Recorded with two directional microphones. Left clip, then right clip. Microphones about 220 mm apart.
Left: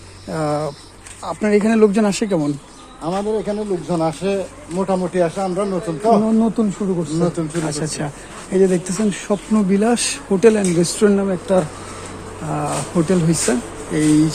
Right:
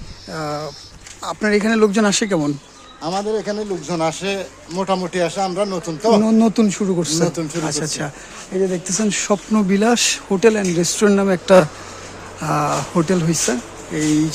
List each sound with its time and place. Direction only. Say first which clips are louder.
0.3 s speech: left 4 dB; centre (ahead or behind)
1.2 s speech: left 1 dB; 10° right (ahead or behind)
3.0 s speech: even; 45° right (ahead or behind)
7.7 s speech: right 1 dB; 10° right (ahead or behind)
9.0 s speech: right 2 dB; 20° right (ahead or behind)